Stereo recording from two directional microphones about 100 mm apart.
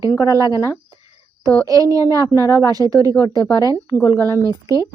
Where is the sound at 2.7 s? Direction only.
35° right (ahead or behind).